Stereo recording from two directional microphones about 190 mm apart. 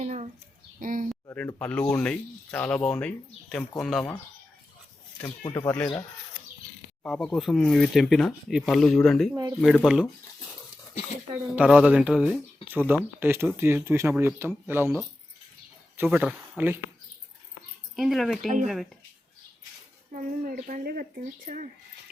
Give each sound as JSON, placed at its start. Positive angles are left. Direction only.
{"t": 0.0, "sound": "a sound", "side_deg": -35}
{"t": 1.3, "sound": "speech", "side_deg": 10}
{"t": 5.4, "sound": "speech", "side_deg": 15}
{"t": 7.0, "sound": "speech", "side_deg": 5}
{"t": 9.3, "sound": "speech", "side_deg": -20}
{"t": 9.6, "sound": "speech", "side_deg": 0}
{"t": 11.5, "sound": "speech", "side_deg": -5}
{"t": 16.0, "sound": "speech", "side_deg": -5}
{"t": 17.9, "sound": "speech", "side_deg": 0}
{"t": 20.1, "sound": "a woman's voice", "side_deg": -45}